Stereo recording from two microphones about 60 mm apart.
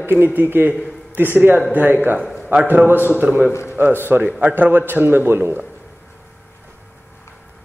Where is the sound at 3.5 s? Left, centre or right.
Left.